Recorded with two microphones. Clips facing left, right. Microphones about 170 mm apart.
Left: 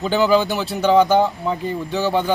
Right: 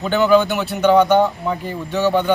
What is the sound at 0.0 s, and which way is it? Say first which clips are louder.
Speech: right 2 dB; centre (ahead or behind).